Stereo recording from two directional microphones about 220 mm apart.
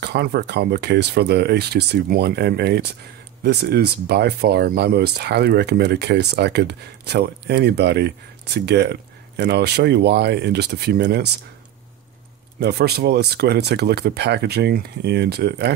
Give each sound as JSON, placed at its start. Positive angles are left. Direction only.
{"t": 0.0, "sound": "speech", "side_deg": -45}
{"t": 12.5, "sound": "speech", "side_deg": -50}